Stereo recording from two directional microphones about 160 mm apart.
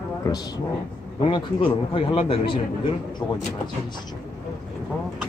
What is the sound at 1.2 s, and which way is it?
Speech, 35° left (ahead or behind).